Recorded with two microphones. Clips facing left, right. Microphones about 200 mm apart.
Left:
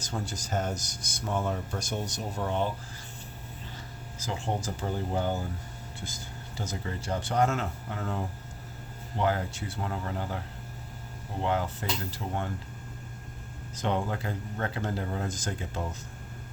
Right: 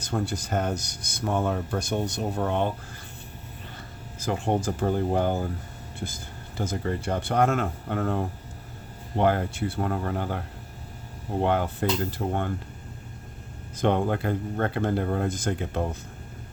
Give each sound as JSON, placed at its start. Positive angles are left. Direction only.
{"t": 0.0, "sound": "speech", "side_deg": -60}
{"t": 4.2, "sound": "speech", "side_deg": -55}
{"t": 13.7, "sound": "speech", "side_deg": -60}